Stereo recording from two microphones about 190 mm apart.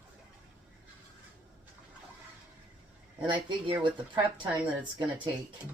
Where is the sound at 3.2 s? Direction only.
25° right (ahead or behind).